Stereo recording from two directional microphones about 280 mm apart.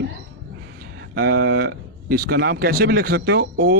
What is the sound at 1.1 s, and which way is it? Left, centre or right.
Speech, right.